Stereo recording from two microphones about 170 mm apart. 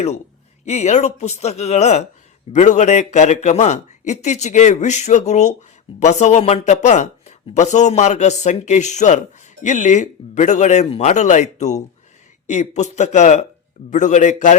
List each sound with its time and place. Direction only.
0.6 s speech: 40° left (ahead or behind)